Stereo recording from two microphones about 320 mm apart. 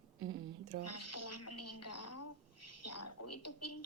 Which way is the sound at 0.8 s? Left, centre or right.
Left.